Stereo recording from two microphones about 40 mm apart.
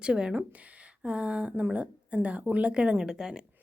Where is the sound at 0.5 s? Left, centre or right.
Right.